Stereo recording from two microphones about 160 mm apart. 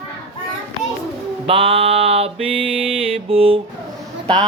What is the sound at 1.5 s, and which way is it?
Music, 35° right (ahead or behind).